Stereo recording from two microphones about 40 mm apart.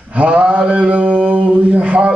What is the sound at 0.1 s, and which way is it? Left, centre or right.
Mantra, right.